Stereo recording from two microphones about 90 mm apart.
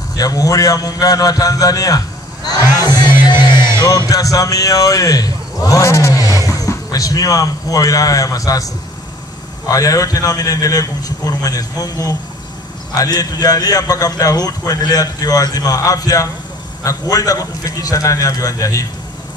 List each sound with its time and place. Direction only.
0.1 s a man's voice: 45° left (ahead or behind)
3.5 s music: 30° right (ahead or behind)
4.1 s a man's voice: 40° left (ahead or behind)
9.7 s a man's voice: 40° left (ahead or behind)